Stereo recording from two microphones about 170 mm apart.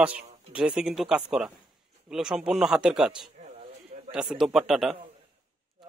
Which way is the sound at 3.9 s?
40° right (ahead or behind).